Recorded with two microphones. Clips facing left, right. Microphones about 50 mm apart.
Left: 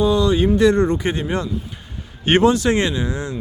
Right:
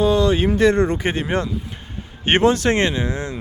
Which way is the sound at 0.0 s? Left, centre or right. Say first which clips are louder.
Even; right.